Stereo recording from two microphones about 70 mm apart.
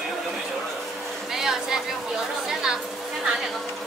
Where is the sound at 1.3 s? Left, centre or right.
Centre.